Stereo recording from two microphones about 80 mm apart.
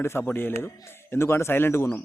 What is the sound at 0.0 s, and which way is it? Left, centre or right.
Speech, left.